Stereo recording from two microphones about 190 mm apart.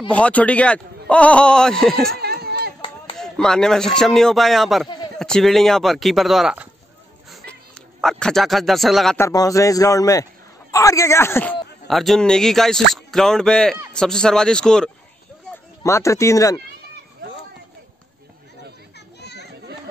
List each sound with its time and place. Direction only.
0.1 s a man's voice: 5° left (ahead or behind)
2.1 s a sound: 55° right (ahead or behind)
3.2 s a man's voice: 5° left (ahead or behind)
7.2 s cat: 5° left (ahead or behind)
9.2 s a man's voice: 20° left (ahead or behind)
11.9 s a man's voice: centre (ahead or behind)
15.5 s speech: 15° left (ahead or behind)
18.9 s children playing: 60° left (ahead or behind)